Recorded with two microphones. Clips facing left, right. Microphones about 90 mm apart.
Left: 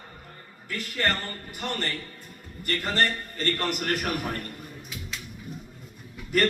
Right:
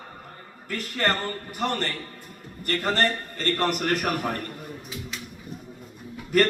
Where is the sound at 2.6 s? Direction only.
40° right (ahead or behind).